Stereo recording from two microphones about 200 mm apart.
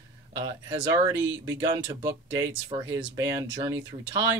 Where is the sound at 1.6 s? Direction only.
20° right (ahead or behind).